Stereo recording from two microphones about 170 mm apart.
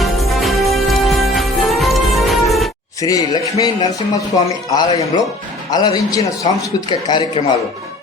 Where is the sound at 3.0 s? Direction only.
20° left (ahead or behind).